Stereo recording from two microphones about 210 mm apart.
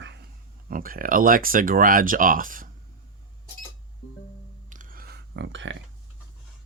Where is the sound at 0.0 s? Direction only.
55° right (ahead or behind).